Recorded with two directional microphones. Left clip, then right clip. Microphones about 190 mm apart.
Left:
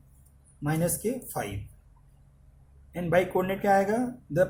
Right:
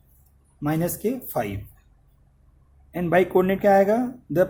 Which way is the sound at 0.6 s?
40° right (ahead or behind).